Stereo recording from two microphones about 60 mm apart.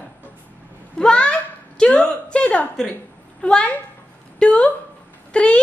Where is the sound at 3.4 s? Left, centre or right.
Centre.